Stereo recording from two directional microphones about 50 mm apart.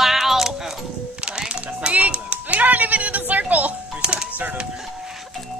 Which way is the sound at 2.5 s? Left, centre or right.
Right.